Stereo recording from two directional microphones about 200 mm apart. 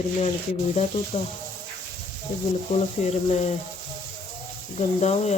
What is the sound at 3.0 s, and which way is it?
Speech, 35° left (ahead or behind).